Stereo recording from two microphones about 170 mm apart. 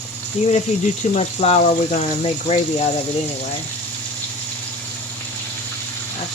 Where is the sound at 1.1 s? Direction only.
40° left (ahead or behind).